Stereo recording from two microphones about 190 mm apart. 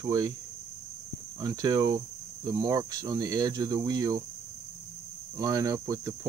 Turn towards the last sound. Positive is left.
turn(degrees=-20)  # may be behind; listen again after turning